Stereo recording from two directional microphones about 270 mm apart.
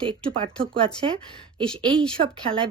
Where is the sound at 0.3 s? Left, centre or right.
Centre.